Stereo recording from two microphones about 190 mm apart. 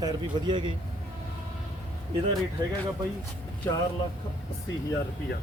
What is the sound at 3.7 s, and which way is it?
Speech, 10° left (ahead or behind).